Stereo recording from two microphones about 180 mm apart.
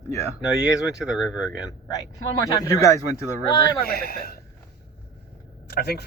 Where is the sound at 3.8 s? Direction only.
60° left (ahead or behind).